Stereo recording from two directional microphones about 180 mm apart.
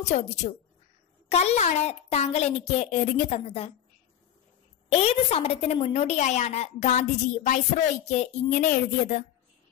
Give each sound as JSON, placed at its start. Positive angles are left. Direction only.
{"t": 0.0, "sound": "a woman's voice", "side_deg": 40}
{"t": 4.8, "sound": "a woman's voice", "side_deg": 35}